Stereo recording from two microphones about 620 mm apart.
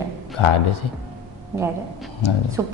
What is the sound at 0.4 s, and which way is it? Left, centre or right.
Speech, left.